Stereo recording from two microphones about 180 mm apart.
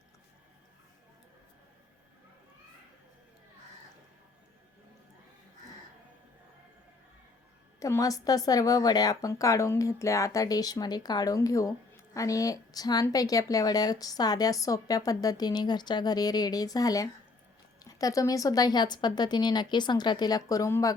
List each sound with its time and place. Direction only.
7.8 s speech: 15° left (ahead or behind)